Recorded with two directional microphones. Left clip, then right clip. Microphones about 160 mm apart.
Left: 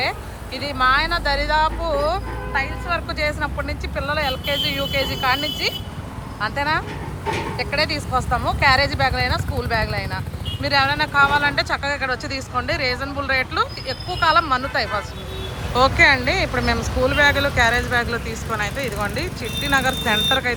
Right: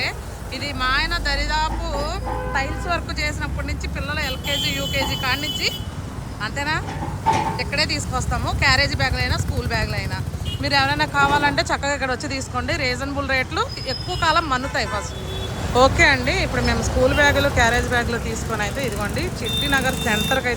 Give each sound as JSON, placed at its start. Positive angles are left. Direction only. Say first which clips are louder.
{"t": 0.6, "sound": "speech", "louder": "left 4 dB", "side_deg": -5}
{"t": 2.5, "sound": "speech", "louder": "left 2 dB", "side_deg": -20}
{"t": 3.2, "sound": "speech", "louder": "left 3 dB", "side_deg": -5}